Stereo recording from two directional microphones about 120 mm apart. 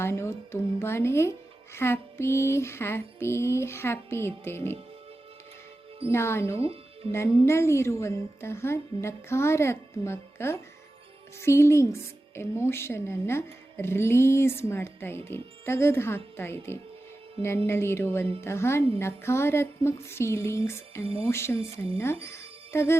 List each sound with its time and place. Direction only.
0.0 s speech: 20° left (ahead or behind)
6.1 s speech: 20° left (ahead or behind)
6.6 s music: 50° right (ahead or behind)
7.1 s speech: 20° left (ahead or behind)
21.0 s speech: 50° right (ahead or behind)
21.2 s speech: 20° left (ahead or behind)